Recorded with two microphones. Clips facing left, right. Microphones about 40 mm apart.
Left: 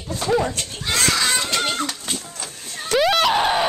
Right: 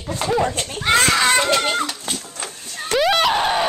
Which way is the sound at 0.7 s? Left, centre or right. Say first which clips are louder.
Right 7 dB; right.